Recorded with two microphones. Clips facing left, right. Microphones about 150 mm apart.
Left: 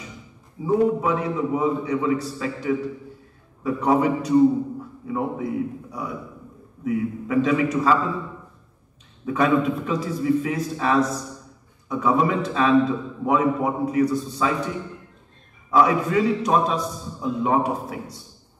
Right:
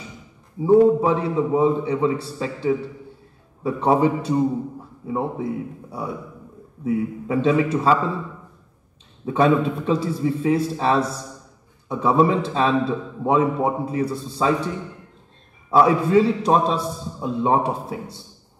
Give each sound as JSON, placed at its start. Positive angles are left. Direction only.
{"t": 0.7, "sound": "a man's voice", "side_deg": -30}
{"t": 9.2, "sound": "a man's voice", "side_deg": -30}
{"t": 15.7, "sound": "a man's voice", "side_deg": -30}